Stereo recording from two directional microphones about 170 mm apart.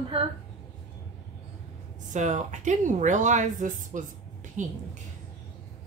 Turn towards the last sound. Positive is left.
turn(degrees=-45)  # may be behind; listen again after turning